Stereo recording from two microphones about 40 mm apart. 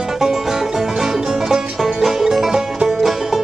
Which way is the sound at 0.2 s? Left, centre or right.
Centre.